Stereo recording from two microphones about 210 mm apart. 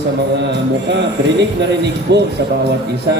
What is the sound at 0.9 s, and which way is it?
Music, 55° right (ahead or behind).